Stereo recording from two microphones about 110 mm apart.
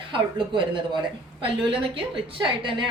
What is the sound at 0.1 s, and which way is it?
A woman's voice, 45° right (ahead or behind).